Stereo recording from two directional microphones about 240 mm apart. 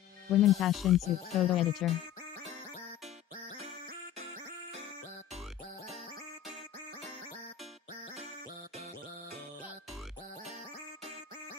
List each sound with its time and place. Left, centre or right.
0.4 s speech: centre